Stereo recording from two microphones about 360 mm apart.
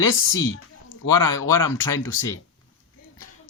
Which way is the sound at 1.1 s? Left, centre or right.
Left.